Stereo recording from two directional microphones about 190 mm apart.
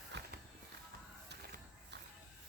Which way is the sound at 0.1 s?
65° right (ahead or behind).